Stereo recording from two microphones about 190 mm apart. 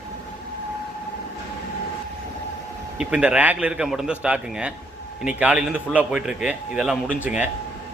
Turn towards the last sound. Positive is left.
turn(degrees=-10)  # may be behind; listen again after turning